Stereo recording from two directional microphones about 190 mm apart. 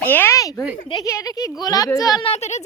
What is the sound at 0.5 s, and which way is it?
Speech, centre (ahead or behind).